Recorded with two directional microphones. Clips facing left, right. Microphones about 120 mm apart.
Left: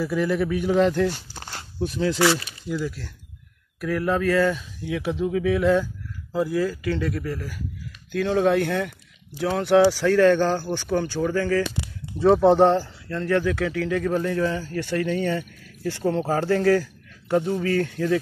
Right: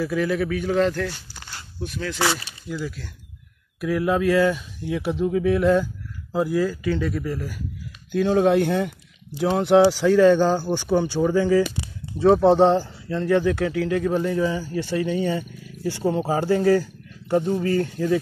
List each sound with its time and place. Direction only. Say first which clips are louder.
0.0 s speech: even; centre (ahead or behind)
1.1 s walk: left 3 dB; 45° left (ahead or behind)
1.8 s speech: left 6 dB; 35° left (ahead or behind)
2.1 s speech: left 1 dB; 25° right (ahead or behind)
2.7 s speech: left 2 dB; centre (ahead or behind)
3.8 s speech: right 2 dB; 10° right (ahead or behind)
6.3 s speech: right 1 dB; 20° right (ahead or behind)
7.1 s speech: right 1 dB; 10° right (ahead or behind)
12.2 s speech: right 1 dB; 5° right (ahead or behind)
12.5 s speech: right 1 dB; 15° right (ahead or behind)